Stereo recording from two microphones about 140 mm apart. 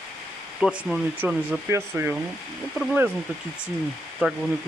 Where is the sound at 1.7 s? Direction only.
15° right (ahead or behind).